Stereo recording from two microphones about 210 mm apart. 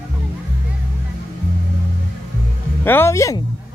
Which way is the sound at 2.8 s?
10° left (ahead or behind).